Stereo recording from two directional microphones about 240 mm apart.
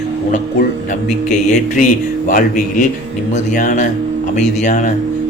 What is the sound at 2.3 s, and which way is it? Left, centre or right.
A man's voice, left.